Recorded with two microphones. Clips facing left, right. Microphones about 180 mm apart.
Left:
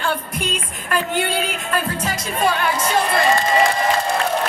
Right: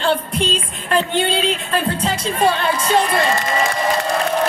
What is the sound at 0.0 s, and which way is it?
Music, 30° right (ahead or behind).